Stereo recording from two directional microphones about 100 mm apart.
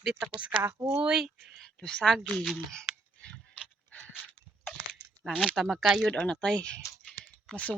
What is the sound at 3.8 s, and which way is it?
Pant, 15° left (ahead or behind).